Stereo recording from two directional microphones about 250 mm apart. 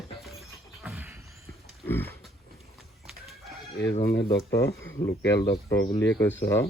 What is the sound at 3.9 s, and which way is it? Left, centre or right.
Speech, left.